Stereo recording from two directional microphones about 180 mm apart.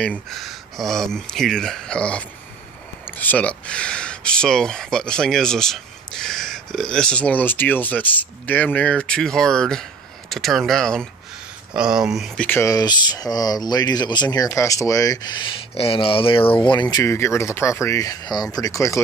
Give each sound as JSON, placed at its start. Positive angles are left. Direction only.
{"t": 0.0, "sound": "speech", "side_deg": 5}
{"t": 12.4, "sound": "speech", "side_deg": 15}
{"t": 16.9, "sound": "speech", "side_deg": 15}